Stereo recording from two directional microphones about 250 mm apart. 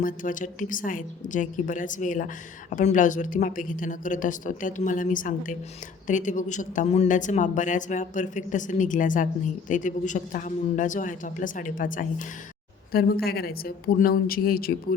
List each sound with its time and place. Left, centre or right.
0.0 s speech: left